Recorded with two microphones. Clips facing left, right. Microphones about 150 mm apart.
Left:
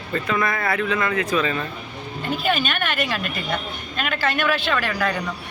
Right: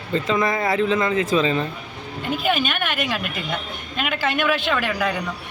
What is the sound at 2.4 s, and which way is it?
A woman's voice, 10° right (ahead or behind).